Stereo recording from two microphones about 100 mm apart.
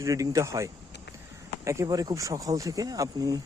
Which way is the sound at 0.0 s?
35° right (ahead or behind).